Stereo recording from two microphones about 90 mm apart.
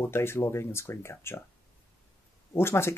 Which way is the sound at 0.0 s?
25° left (ahead or behind).